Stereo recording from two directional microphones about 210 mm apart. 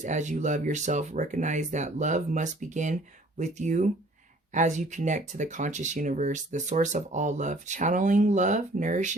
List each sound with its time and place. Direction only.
0.0 s speech: 35° right (ahead or behind)